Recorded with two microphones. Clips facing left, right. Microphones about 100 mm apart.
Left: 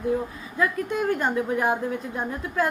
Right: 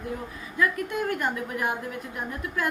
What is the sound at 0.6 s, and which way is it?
A woman's voice, 25° left (ahead or behind).